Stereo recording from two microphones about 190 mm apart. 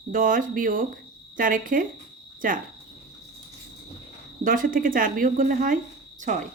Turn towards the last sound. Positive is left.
turn(degrees=-40)  # may be behind; listen again after turning